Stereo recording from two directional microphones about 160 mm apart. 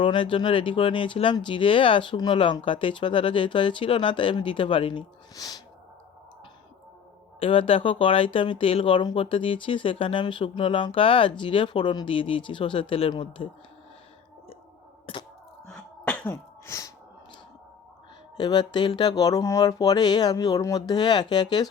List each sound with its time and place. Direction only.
0.0 s speech: 30° left (ahead or behind)
7.3 s speech: 35° left (ahead or behind)
15.6 s sneeze: 5° left (ahead or behind)
18.3 s speech: 25° left (ahead or behind)